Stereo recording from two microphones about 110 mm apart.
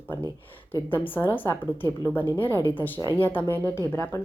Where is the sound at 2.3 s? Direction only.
20° left (ahead or behind).